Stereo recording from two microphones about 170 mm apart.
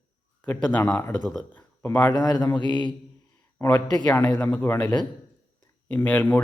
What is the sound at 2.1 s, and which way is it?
Mantra, 25° left (ahead or behind).